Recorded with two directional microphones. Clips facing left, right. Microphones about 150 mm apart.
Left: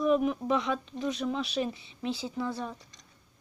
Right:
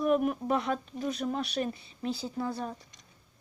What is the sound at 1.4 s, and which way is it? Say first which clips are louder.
Speech: left 1 dB; centre (ahead or behind).